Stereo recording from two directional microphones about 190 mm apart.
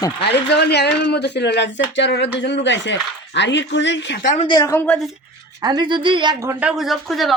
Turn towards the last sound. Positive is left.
turn(degrees=0)  # may be behind; listen again after turning